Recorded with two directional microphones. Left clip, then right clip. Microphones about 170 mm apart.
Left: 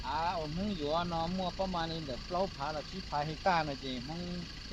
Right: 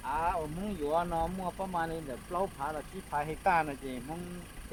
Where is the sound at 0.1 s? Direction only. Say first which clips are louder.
Right 2 dB; 55° left (ahead or behind).